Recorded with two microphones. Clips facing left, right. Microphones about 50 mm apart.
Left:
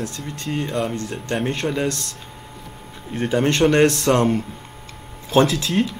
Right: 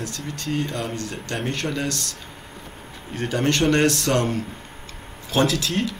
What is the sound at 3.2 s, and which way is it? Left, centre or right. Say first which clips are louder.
Speech: left 3 dB; left.